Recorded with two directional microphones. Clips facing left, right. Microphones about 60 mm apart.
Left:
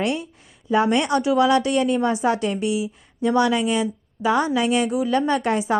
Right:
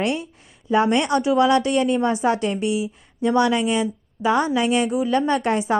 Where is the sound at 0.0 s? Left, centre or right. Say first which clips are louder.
Even; right.